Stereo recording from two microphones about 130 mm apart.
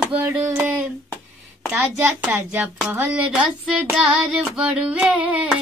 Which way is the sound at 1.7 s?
10° right (ahead or behind).